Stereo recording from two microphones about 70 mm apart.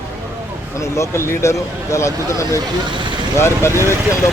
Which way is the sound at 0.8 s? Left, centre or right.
Left.